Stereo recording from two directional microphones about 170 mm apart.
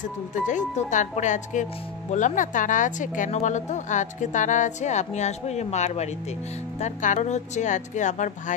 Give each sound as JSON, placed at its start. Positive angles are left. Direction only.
{"t": 0.3, "sound": "a woman's voice", "side_deg": 45}